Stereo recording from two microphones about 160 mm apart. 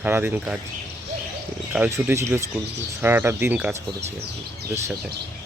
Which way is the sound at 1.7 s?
15° right (ahead or behind).